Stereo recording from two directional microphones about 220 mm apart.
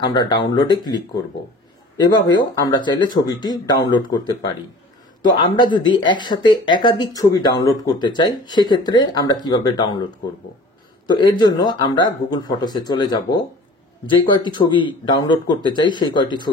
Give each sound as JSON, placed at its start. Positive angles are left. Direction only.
{"t": 0.3, "sound": "speech", "side_deg": 20}
{"t": 11.1, "sound": "speech", "side_deg": 20}
{"t": 14.4, "sound": "speech", "side_deg": 20}